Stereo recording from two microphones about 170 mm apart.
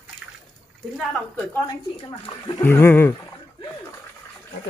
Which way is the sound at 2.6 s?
10° left (ahead or behind).